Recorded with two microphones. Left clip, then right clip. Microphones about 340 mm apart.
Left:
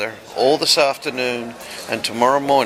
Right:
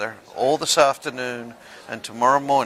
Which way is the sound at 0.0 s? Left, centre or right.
Right.